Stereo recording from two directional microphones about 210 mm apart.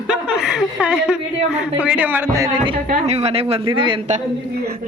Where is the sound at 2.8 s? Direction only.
35° right (ahead or behind).